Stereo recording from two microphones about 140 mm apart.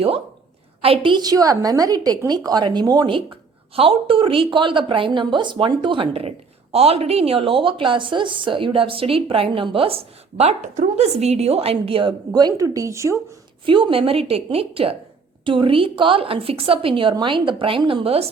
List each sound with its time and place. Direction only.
0.8 s a woman's voice: 40° right (ahead or behind); by 13.1 s 20° right (ahead or behind)
13.7 s a woman's voice: 35° right (ahead or behind)